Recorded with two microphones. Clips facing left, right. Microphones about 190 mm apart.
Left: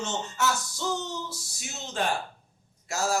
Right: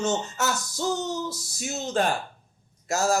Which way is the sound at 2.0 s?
40° right (ahead or behind).